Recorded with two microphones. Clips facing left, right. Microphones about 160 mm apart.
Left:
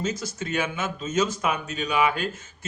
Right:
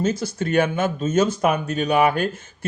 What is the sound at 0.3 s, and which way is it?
Speech, 60° right (ahead or behind).